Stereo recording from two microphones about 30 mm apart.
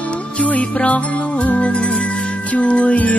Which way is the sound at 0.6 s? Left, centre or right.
Left.